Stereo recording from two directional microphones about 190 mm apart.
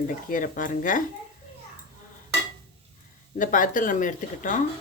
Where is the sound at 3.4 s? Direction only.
45° left (ahead or behind).